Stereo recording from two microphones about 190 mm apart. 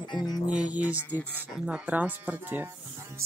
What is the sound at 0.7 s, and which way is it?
Speech, 5° right (ahead or behind).